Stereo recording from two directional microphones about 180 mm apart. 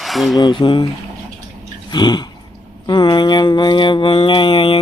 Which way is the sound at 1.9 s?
25° left (ahead or behind).